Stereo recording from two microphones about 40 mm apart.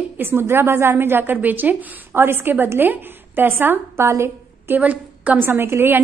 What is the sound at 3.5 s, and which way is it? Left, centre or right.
A woman's voice, right.